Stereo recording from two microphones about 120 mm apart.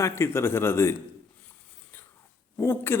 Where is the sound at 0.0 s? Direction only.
20° left (ahead or behind).